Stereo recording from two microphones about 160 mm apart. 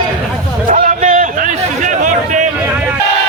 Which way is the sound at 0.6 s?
55° right (ahead or behind).